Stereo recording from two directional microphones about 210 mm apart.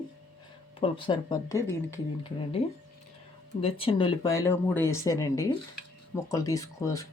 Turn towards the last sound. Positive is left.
turn(degrees=15)  # may be behind; listen again after turning